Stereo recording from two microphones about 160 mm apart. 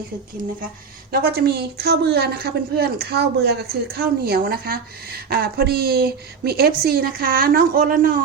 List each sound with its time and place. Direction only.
1.1 s a woman's voice: 75° right (ahead or behind)